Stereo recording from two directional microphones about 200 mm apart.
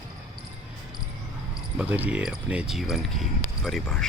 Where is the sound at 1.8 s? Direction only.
10° right (ahead or behind).